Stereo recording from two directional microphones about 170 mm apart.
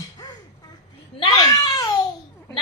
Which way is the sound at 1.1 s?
25° left (ahead or behind).